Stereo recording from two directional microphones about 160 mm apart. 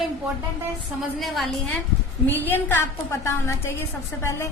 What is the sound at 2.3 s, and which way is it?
A woman's voice, 10° left (ahead or behind).